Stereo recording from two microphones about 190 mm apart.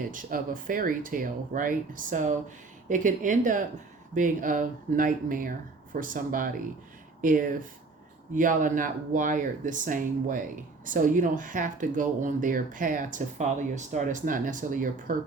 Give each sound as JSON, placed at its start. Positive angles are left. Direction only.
{"t": 0.1, "sound": "speech", "side_deg": -45}